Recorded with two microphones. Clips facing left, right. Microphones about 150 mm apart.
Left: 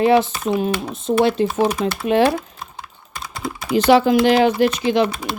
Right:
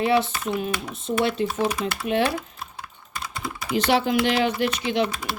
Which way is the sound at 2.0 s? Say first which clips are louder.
Left 7 dB; 90° left.